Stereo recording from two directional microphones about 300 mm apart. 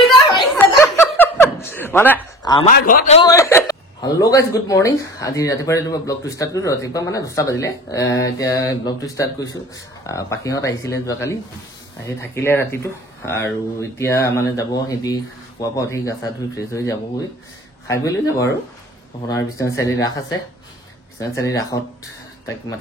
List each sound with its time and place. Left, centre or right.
0.0 s laughter: centre
2.7 s a man's voice: left
3.3 s speech: centre
21.2 s speech: centre